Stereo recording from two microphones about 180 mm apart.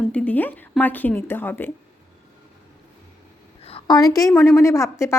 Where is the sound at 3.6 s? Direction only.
35° left (ahead or behind).